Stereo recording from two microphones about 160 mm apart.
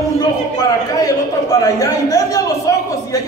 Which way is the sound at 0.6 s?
25° left (ahead or behind).